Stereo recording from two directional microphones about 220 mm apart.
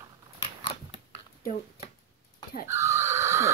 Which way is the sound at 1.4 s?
40° left (ahead or behind).